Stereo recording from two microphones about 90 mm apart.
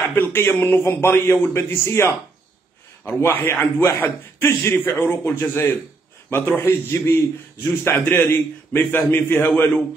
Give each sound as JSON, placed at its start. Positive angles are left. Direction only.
{"t": 0.1, "sound": "a man's voice", "side_deg": 25}
{"t": 3.1, "sound": "a man's voice", "side_deg": 25}